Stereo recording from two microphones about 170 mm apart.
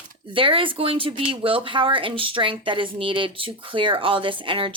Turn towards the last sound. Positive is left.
turn(degrees=-30)  # may be behind; listen again after turning